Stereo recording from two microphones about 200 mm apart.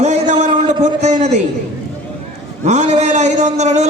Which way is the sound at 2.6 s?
35° right (ahead or behind).